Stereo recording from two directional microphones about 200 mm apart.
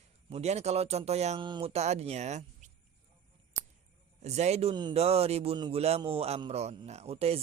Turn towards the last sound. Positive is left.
turn(degrees=-30)  # may be behind; listen again after turning